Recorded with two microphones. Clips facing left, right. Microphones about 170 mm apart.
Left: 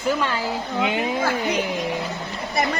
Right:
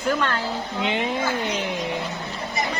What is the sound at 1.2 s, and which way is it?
Speech, 65° left (ahead or behind).